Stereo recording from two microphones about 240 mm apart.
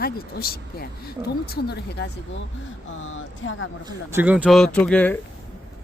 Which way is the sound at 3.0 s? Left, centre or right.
Left.